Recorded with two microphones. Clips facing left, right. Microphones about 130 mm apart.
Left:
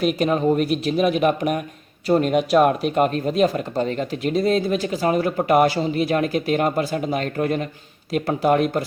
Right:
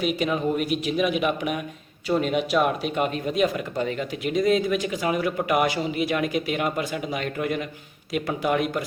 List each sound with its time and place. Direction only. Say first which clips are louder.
0.2 s speech: left 5 dB; 40° left (ahead or behind)